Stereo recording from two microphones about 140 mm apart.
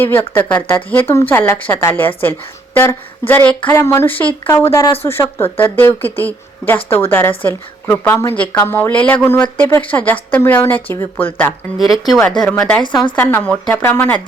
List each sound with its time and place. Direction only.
0.0 s a woman's voice: 15° left (ahead or behind)
11.8 s a woman's voice: 25° left (ahead or behind)
13.1 s a woman's voice: 15° left (ahead or behind)